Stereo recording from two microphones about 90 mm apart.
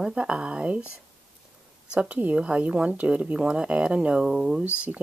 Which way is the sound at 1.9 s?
15° right (ahead or behind).